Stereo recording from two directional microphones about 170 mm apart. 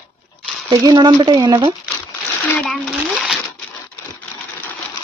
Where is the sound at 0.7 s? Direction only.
20° right (ahead or behind).